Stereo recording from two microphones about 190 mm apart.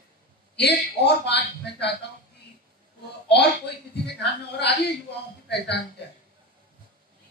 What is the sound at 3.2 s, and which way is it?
A woman's voice, 60° left (ahead or behind).